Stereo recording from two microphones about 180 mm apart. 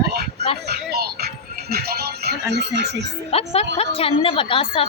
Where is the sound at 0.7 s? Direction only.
60° right (ahead or behind).